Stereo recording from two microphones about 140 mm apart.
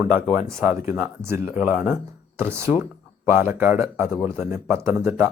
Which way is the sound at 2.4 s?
15° right (ahead or behind).